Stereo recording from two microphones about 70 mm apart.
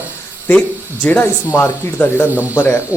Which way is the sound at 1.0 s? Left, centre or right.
Left.